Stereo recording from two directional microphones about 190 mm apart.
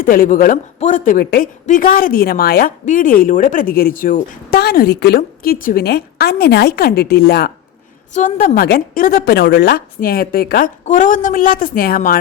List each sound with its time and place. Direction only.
0.0 s speech: 50° left (ahead or behind)
8.1 s a woman's voice: 40° left (ahead or behind)